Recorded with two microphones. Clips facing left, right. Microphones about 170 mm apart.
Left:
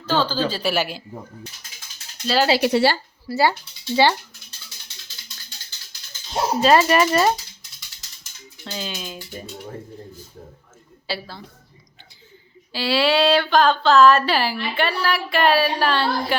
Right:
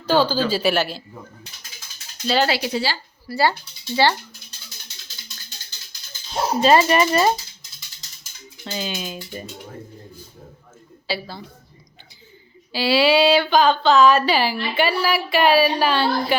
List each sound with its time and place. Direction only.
0.0 s speech: 10° right (ahead or behind)
0.7 s a man's voice: 10° left (ahead or behind)
2.2 s speech: centre (ahead or behind)
2.6 s a woman's voice: 65° left (ahead or behind)
3.2 s speech: 20° left (ahead or behind)
6.6 s speech: centre (ahead or behind)
8.6 s speech: 5° right (ahead or behind)
11.0 s a woman's voice: centre (ahead or behind)
12.7 s speech: 5° right (ahead or behind)